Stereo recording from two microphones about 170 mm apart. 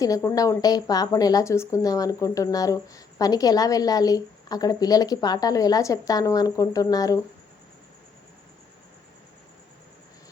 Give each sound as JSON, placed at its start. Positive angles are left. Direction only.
{"t": 0.0, "sound": "a woman's voice", "side_deg": 20}